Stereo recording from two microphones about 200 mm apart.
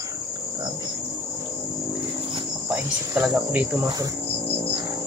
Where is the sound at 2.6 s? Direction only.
5° right (ahead or behind).